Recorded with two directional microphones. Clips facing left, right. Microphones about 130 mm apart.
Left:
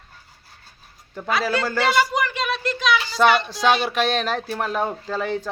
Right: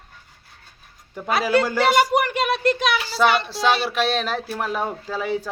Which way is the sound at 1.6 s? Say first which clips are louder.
Right 2 dB; 15° right (ahead or behind).